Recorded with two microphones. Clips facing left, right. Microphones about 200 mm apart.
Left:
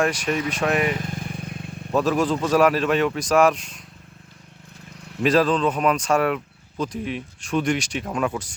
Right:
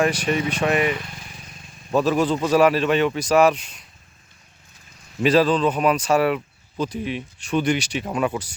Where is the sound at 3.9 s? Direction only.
60° left (ahead or behind).